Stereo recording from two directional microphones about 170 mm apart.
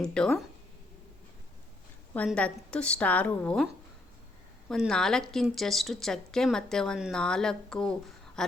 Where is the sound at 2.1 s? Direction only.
5° left (ahead or behind).